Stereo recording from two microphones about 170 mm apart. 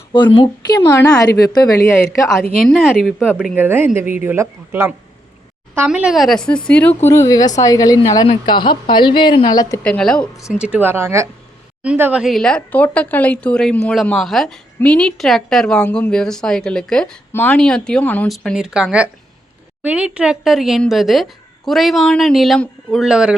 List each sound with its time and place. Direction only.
0.3 s a woman's voice: 25° left (ahead or behind)
2.2 s a woman's voice: centre (ahead or behind); by 9.8 s 20° left (ahead or behind)
9.8 s speech: 5° left (ahead or behind)
10.5 s a woman's voice: 5° right (ahead or behind); by 18.3 s 10° left (ahead or behind)
18.3 s speech: centre (ahead or behind)